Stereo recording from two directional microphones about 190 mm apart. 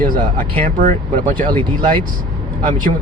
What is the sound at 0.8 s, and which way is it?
Speech, 45° right (ahead or behind).